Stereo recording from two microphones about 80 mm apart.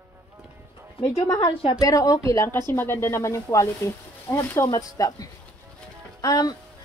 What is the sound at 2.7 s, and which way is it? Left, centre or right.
Speech, left.